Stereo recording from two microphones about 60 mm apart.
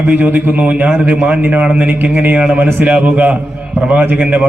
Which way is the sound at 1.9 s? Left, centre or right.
Right.